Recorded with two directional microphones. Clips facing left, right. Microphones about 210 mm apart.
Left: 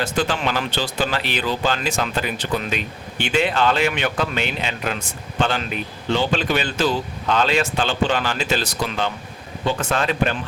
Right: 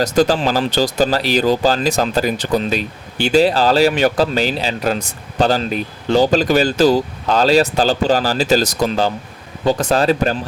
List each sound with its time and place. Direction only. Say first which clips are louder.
0.0 s speech: right 7 dB; 40° right (ahead or behind)